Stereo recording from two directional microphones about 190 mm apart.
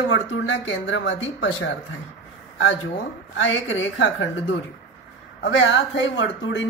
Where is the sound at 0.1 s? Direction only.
85° left.